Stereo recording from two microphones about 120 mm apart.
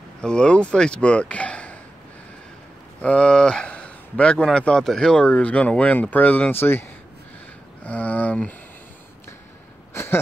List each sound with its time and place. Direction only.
0.2 s speech: 5° left (ahead or behind)
3.0 s speech: 10° left (ahead or behind)
7.8 s a sound: 10° left (ahead or behind)
9.9 s wheeze: 20° left (ahead or behind)